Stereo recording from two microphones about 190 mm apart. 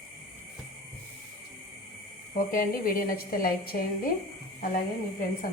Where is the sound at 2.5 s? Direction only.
50° left (ahead or behind).